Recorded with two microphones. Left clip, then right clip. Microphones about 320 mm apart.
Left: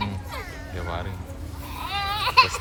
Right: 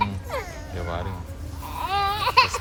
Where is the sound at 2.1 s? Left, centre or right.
Right.